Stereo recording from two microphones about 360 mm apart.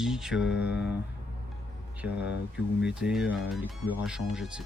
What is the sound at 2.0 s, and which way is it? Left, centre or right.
Speech, centre.